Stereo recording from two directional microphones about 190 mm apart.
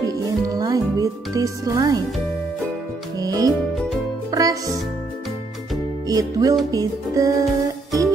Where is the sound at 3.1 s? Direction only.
20° right (ahead or behind).